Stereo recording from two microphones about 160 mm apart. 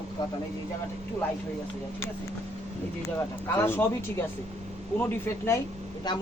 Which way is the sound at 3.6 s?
15° left (ahead or behind).